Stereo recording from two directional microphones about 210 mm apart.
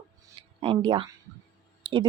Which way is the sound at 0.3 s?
25° right (ahead or behind).